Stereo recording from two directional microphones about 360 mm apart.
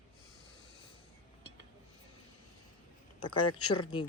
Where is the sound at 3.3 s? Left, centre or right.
Left.